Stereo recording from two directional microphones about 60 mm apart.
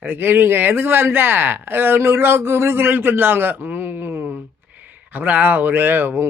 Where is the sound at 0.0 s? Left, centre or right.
Right.